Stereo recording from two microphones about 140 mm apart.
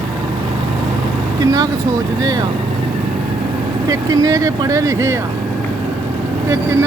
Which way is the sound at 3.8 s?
25° right (ahead or behind).